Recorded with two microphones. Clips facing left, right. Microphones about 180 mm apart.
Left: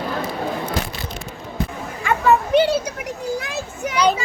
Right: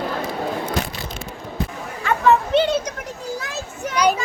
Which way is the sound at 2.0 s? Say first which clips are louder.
Even; 10° left (ahead or behind).